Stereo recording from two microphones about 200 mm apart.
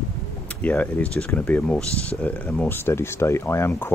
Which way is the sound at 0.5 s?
5° left (ahead or behind).